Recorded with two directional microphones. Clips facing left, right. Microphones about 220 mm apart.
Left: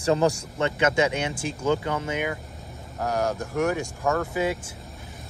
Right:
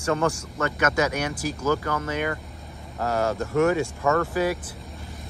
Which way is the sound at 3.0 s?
90° right.